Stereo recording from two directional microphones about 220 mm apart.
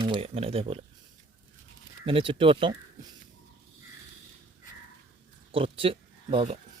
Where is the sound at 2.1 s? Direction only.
25° right (ahead or behind).